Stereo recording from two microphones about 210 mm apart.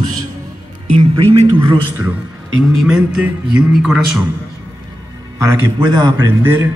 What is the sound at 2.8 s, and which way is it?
A man's voice, 5° right (ahead or behind).